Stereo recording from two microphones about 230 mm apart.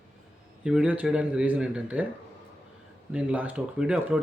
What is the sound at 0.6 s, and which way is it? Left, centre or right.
Speech, centre.